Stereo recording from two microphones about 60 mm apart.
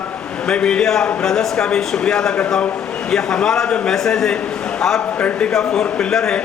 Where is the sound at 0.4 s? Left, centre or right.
Centre.